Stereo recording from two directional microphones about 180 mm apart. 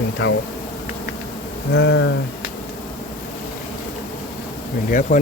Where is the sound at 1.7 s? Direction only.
90° left.